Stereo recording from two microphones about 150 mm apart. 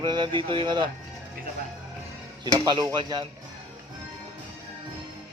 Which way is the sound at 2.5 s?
30° right (ahead or behind).